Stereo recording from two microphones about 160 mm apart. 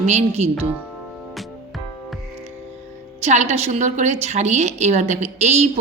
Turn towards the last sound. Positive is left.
turn(degrees=-45)  # may be behind; listen again after turning